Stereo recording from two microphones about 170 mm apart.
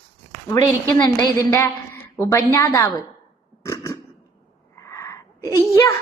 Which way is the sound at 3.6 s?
20° left (ahead or behind).